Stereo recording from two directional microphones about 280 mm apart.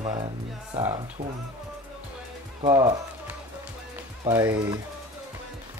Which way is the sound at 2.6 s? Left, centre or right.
Centre.